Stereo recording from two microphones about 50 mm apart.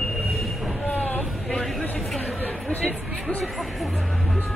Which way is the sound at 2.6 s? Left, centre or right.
Left.